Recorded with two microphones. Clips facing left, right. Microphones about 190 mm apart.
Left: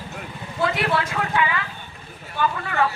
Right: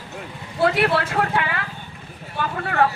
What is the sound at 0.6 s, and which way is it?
A woman's voice, 60° right (ahead or behind).